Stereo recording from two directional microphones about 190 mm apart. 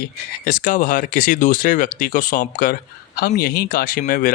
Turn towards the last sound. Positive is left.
turn(degrees=45)  # may be behind; listen again after turning